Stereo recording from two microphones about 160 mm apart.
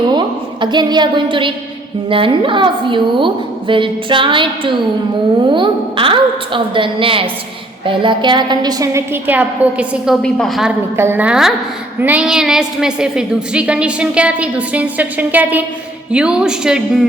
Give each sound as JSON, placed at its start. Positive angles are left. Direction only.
{"t": 0.1, "sound": "a woman's voice", "side_deg": -30}
{"t": 10.2, "sound": "speech", "side_deg": 5}
{"t": 10.9, "sound": "a woman's voice", "side_deg": -15}